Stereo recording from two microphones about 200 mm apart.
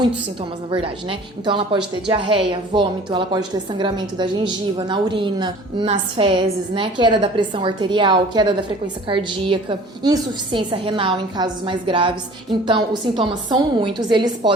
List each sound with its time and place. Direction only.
0.7 s a woman's voice: 25° right (ahead or behind)